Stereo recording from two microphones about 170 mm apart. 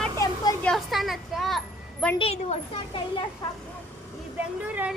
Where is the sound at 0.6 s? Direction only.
Centre (ahead or behind).